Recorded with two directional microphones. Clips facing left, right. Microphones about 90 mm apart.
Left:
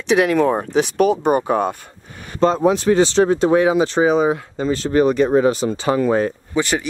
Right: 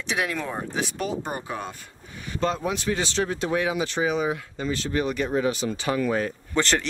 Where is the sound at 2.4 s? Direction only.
35° left (ahead or behind).